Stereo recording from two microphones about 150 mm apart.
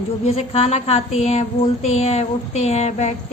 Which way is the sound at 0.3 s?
40° left (ahead or behind).